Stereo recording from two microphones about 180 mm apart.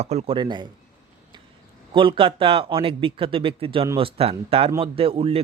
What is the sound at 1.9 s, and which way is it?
A man's voice, 30° right (ahead or behind).